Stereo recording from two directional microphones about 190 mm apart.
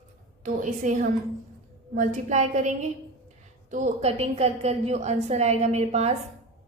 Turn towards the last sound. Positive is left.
turn(degrees=-35)  # may be behind; listen again after turning